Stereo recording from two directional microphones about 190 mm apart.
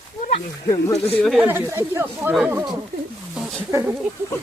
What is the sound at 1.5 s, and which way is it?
Speech, 15° right (ahead or behind).